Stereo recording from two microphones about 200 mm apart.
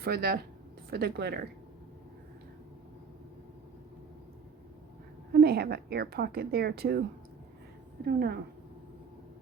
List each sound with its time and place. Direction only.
0.0 s a woman's voice: 50° right (ahead or behind)
5.3 s a woman's voice: 55° right (ahead or behind)
8.0 s a woman's voice: 55° right (ahead or behind)